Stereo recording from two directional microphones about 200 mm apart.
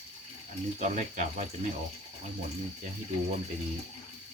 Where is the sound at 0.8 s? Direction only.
35° right (ahead or behind).